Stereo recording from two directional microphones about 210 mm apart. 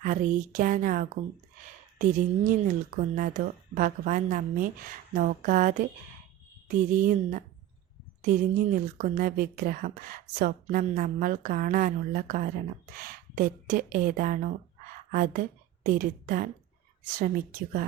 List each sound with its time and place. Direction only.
0.0 s a woman's voice: 40° right (ahead or behind)